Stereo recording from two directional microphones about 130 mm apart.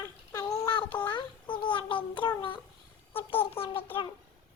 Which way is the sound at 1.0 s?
35° left (ahead or behind).